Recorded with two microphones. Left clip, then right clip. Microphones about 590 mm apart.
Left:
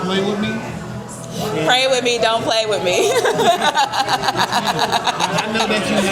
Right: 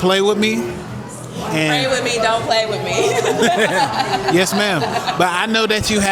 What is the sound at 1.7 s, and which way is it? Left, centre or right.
Speech, left.